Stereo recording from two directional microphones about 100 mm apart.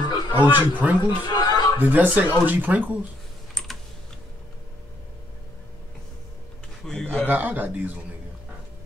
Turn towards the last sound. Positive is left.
turn(degrees=-15)  # may be behind; listen again after turning